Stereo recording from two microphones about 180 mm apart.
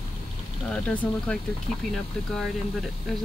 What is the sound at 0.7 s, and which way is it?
Speech, 5° left (ahead or behind).